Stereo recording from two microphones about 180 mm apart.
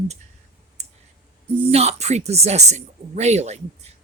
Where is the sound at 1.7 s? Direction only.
35° right (ahead or behind).